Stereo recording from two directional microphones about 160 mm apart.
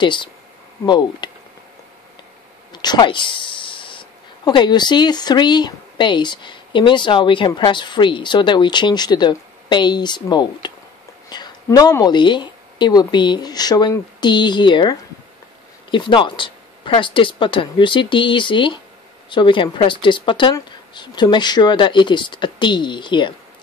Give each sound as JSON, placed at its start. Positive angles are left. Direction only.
{"t": 0.0, "sound": "speech", "side_deg": 30}
{"t": 2.7, "sound": "speech", "side_deg": 25}